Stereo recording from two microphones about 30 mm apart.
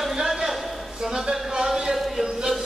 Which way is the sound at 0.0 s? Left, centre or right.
Centre.